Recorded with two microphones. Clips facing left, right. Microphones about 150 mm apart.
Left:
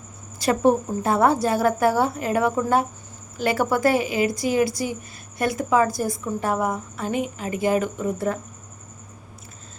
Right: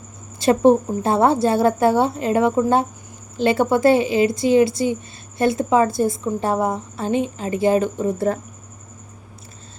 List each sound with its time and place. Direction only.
0.3 s a woman's voice: 25° right (ahead or behind)